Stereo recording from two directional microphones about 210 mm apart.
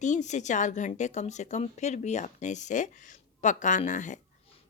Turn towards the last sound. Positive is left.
turn(degrees=35)  # may be behind; listen again after turning